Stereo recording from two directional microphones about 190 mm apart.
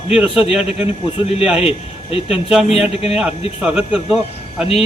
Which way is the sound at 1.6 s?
30° left (ahead or behind).